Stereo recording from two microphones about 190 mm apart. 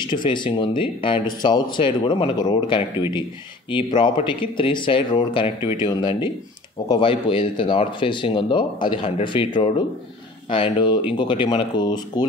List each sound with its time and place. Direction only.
0.0 s speech: 25° left (ahead or behind)